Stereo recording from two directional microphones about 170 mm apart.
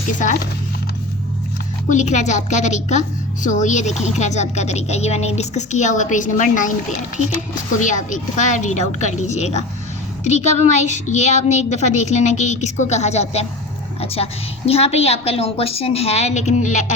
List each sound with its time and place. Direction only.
0.1 s a woman's voice: 50° left (ahead or behind)
1.9 s a woman's voice: 45° left (ahead or behind)